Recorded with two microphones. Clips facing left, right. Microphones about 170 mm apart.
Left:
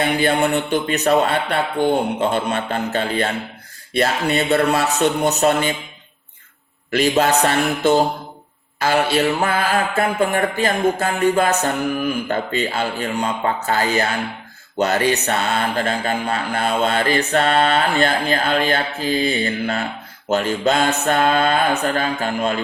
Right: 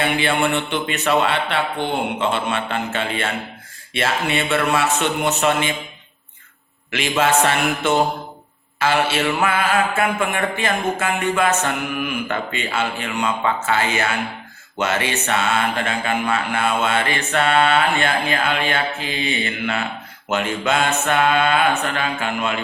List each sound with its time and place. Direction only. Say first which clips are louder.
0.0 s mantra: left 2 dB; 40° left (ahead or behind)
6.9 s mantra: left 2 dB; 40° left (ahead or behind)